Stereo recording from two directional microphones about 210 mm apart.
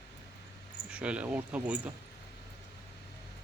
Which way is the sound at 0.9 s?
5° right (ahead or behind).